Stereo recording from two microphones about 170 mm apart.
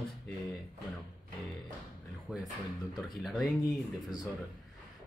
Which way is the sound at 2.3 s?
Centre (ahead or behind).